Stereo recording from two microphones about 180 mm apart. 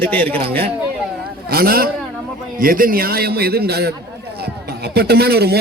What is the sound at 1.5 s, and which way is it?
Speech, 55° right (ahead or behind).